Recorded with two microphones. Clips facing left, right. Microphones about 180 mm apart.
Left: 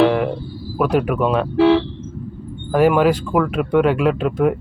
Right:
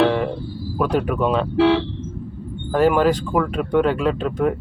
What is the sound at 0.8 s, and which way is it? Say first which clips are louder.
Speech: left 3 dB; 10° left (ahead or behind).